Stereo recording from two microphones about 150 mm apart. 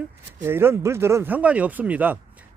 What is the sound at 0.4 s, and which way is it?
Speech, 15° right (ahead or behind).